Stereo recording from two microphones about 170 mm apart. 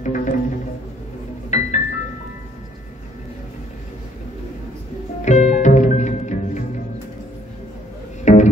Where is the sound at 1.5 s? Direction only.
45° left (ahead or behind).